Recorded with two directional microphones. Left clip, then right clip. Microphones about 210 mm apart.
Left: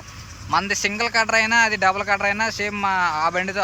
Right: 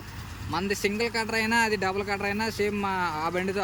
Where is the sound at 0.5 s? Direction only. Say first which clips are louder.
Left 7 dB; 10° right (ahead or behind).